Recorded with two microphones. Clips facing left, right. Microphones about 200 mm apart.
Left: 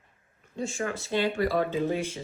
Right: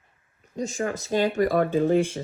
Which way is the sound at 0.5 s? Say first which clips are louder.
Right 3 dB; 40° right (ahead or behind).